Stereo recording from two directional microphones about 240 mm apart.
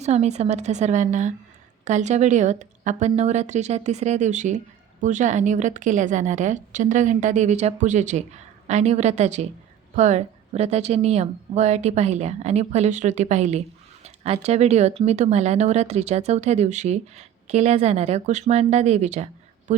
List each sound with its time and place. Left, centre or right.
0.0 s a woman's voice: right